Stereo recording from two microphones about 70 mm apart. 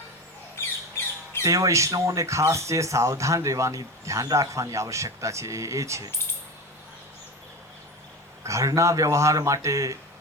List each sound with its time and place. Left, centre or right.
1.5 s speech: right
8.4 s speech: right